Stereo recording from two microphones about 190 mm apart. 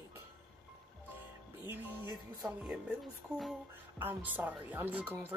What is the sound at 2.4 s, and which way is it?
Speech, centre (ahead or behind).